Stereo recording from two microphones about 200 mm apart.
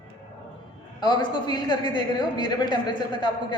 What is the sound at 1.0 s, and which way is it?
A man's voice, 20° left (ahead or behind).